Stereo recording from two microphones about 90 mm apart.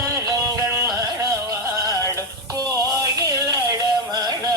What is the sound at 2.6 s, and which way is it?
Music, 40° right (ahead or behind).